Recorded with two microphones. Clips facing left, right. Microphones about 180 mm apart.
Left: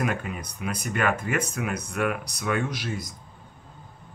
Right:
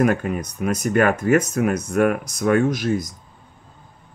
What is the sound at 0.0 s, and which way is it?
Speech, 45° right (ahead or behind).